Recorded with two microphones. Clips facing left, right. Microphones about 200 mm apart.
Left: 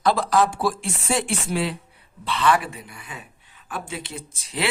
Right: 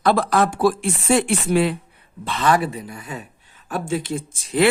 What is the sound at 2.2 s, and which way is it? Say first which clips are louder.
Speech: right 2 dB; 45° right (ahead or behind).